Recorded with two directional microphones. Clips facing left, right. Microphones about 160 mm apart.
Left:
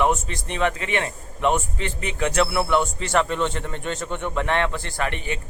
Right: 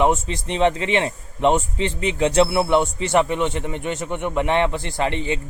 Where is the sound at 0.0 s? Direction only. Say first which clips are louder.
Right 3 dB; 20° right (ahead or behind).